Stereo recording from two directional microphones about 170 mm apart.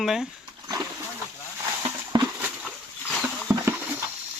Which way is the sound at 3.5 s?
15° right (ahead or behind).